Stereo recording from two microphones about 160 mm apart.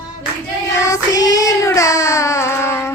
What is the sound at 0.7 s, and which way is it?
Child singing, 20° left (ahead or behind).